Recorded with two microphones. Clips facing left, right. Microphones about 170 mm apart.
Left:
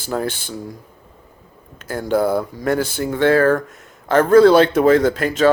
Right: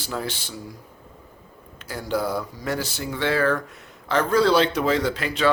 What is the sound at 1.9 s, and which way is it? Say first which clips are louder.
Speech: left 8 dB; 50° left (ahead or behind).